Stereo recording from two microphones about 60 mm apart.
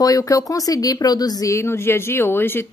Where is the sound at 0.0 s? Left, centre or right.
Left.